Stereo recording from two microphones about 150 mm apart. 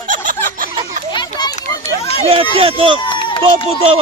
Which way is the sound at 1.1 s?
30° left (ahead or behind).